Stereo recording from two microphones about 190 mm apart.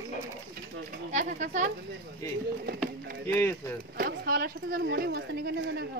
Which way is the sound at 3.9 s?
50° right (ahead or behind).